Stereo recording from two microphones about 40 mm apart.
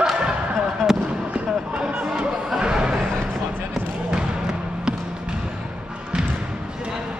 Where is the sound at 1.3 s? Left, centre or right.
Right.